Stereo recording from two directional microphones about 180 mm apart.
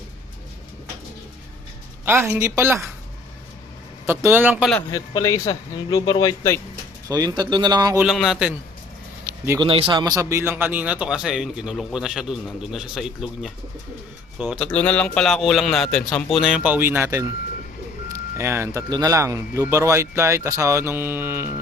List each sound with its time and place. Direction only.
2.0 s speech: 15° right (ahead or behind)
4.0 s speech: 15° right (ahead or behind)
4.9 s a man's voice: 20° left (ahead or behind)
7.1 s speech: 20° right (ahead or behind)
7.9 s speech: centre (ahead or behind)
9.6 s speech: 30° right (ahead or behind); by 14.7 s 5° right (ahead or behind)
14.7 s speech: 10° left (ahead or behind); by 21.5 s 10° right (ahead or behind)